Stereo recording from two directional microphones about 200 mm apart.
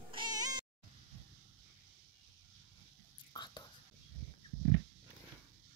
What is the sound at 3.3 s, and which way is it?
Whispering, 20° left (ahead or behind).